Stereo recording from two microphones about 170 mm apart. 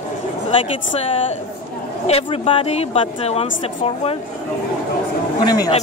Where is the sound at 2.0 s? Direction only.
35° left (ahead or behind).